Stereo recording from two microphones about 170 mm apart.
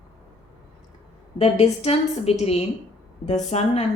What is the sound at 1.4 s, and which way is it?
Speech, 40° left (ahead or behind).